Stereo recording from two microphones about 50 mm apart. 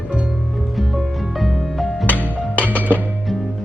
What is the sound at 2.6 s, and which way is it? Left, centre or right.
Music, right.